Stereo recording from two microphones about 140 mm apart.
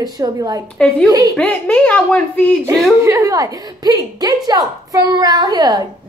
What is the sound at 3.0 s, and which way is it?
A woman's voice, 20° right (ahead or behind).